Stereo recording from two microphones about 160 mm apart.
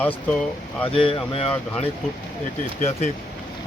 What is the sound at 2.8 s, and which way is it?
Speech, 45° left (ahead or behind).